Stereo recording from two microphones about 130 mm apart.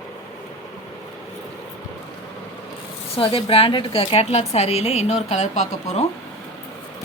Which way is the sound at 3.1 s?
45° left (ahead or behind).